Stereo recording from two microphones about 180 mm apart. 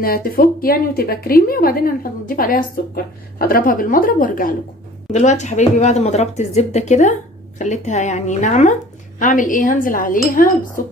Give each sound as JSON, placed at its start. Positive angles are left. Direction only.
{"t": 0.0, "sound": "a woman's voice", "side_deg": 55}
{"t": 5.1, "sound": "a woman's voice", "side_deg": 40}